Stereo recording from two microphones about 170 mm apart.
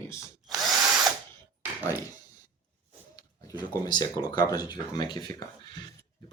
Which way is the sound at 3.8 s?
25° left (ahead or behind).